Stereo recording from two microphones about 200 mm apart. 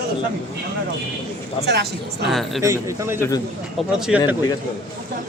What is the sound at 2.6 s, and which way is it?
Speech, 15° right (ahead or behind).